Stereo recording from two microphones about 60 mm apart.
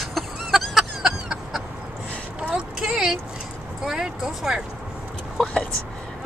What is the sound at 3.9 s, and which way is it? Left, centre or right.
Speech, centre.